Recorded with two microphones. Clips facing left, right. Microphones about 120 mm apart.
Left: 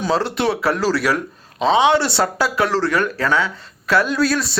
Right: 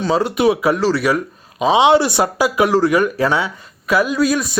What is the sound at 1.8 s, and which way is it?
Speech, 20° right (ahead or behind).